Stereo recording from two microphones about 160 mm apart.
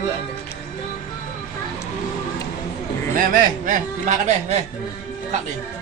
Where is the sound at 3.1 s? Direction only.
55° right (ahead or behind).